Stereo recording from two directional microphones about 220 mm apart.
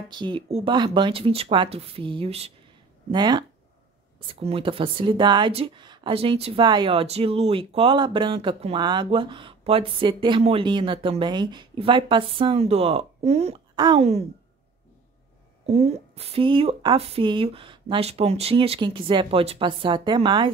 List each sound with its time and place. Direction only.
0.1 s speech: 20° right (ahead or behind)
15.6 s speech: 25° right (ahead or behind)